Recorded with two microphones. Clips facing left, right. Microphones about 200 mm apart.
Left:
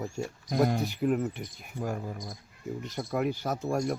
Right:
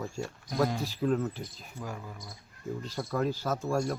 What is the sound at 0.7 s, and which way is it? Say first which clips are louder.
Speech: left 4 dB; 65° left (ahead or behind).